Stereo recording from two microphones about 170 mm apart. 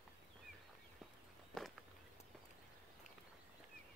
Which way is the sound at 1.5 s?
Centre (ahead or behind).